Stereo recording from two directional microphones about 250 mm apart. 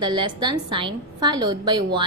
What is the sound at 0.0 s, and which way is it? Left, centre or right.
A woman's voice, centre.